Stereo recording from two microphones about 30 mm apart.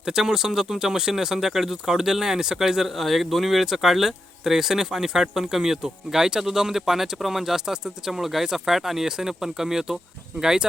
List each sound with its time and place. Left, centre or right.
0.0 s speech: centre